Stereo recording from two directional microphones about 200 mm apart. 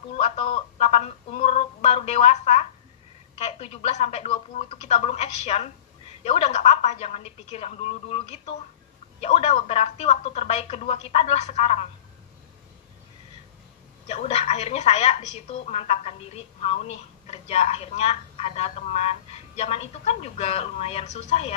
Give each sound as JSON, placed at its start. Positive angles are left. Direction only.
{"t": 0.2, "sound": "a sound", "side_deg": 30}
{"t": 3.3, "sound": "a woman's voice", "side_deg": 35}
{"t": 14.0, "sound": "a woman's voice", "side_deg": 30}